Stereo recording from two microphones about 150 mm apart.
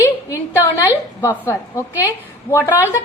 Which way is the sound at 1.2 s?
15° left (ahead or behind).